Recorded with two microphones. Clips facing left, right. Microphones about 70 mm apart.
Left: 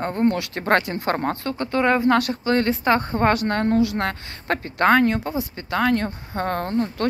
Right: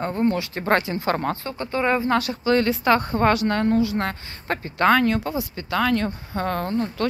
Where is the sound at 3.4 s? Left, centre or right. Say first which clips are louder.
Even; left.